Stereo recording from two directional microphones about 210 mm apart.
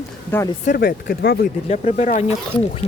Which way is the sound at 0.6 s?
40° left (ahead or behind).